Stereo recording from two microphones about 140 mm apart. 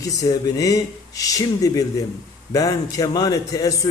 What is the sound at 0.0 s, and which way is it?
A man's voice, 25° left (ahead or behind).